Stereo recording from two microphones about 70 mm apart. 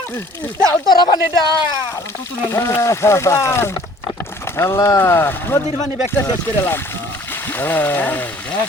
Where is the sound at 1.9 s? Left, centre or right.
Left.